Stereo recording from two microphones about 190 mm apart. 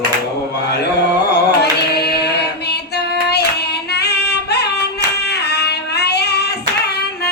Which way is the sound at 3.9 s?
60° left (ahead or behind).